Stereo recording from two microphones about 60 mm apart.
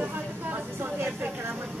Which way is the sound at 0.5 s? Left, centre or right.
Right.